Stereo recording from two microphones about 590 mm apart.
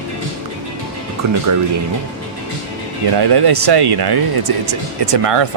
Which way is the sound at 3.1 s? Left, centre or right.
Right.